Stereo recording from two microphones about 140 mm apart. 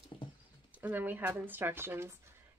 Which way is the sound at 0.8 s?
15° right (ahead or behind).